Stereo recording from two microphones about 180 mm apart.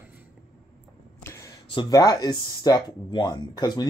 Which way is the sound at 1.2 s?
15° left (ahead or behind).